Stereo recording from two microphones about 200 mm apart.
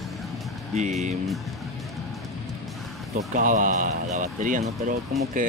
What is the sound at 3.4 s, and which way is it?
Speech, 40° right (ahead or behind).